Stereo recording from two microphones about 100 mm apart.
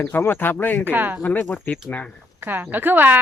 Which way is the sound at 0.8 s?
20° right (ahead or behind).